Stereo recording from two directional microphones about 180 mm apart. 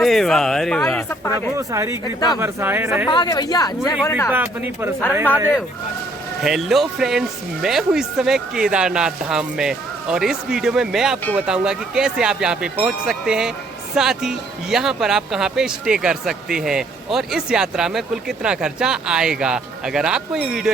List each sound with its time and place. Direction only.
0.0 s speech: centre (ahead or behind)
1.5 s speech: 15° right (ahead or behind)
3.1 s speech: 25° left (ahead or behind)
4.3 s speech: 10° right (ahead or behind)
6.4 s speech: centre (ahead or behind)